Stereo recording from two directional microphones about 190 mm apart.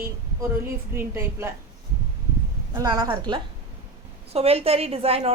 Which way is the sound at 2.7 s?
20° right (ahead or behind).